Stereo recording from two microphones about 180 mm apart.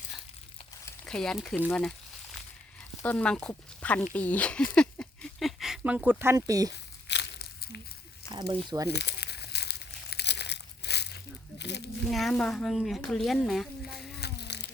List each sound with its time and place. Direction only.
1.0 s speech: 5° left (ahead or behind)
3.0 s speech: 10° left (ahead or behind); by 6.7 s 20° right (ahead or behind)
7.1 s crumpling: 65° left (ahead or behind)
8.3 s speech: 25° right (ahead or behind)
8.9 s crumpling: 70° left (ahead or behind)
11.6 s a sound: 70° left (ahead or behind)
12.1 s speech: centre (ahead or behind)
14.2 s a sound: 65° left (ahead or behind)